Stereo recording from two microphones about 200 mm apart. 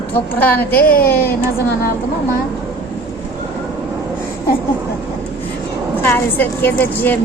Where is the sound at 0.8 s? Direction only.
50° left (ahead or behind).